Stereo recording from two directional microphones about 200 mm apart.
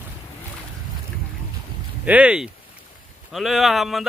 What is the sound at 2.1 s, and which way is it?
Speech, 5° right (ahead or behind).